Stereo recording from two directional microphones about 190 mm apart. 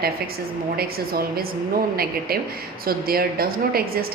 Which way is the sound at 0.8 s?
50° right (ahead or behind).